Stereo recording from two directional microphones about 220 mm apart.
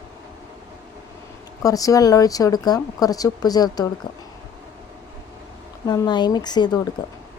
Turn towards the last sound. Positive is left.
turn(degrees=20)  # may be behind; listen again after turning